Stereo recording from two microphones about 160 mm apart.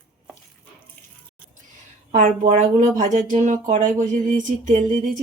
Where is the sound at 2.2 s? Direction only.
55° right (ahead or behind).